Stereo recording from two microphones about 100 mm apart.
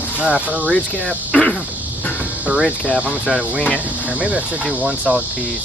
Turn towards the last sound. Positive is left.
turn(degrees=-15)  # may be behind; listen again after turning